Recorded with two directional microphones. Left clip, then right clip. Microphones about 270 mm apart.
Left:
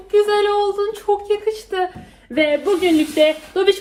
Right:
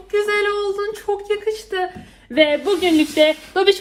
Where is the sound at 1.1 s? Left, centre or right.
Right.